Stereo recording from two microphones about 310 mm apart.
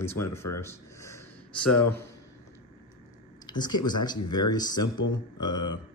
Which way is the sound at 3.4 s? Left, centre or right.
Centre.